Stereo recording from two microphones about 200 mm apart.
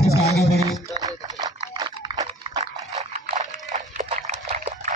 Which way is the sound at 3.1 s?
35° right (ahead or behind).